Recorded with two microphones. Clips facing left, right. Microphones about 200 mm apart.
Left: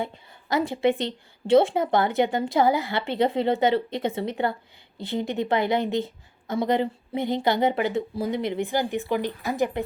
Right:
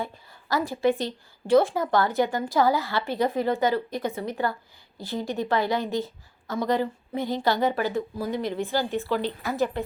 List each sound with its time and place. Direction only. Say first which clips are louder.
0.0 s a woman's voice: left 2 dB; 20° left (ahead or behind)